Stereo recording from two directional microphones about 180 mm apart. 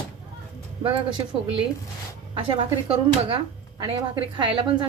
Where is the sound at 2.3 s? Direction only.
30° right (ahead or behind).